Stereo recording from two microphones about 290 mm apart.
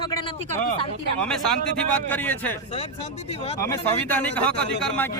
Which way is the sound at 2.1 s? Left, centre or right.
Centre.